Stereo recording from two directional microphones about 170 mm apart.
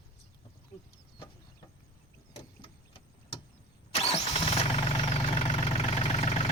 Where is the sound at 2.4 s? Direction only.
30° left (ahead or behind).